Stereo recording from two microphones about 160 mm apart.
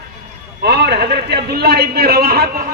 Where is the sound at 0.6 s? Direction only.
90° right.